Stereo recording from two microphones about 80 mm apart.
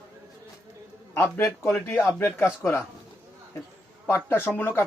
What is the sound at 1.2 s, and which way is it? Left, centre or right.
Speech, left.